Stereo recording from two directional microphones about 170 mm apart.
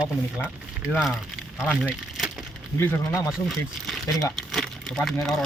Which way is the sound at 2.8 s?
15° left (ahead or behind).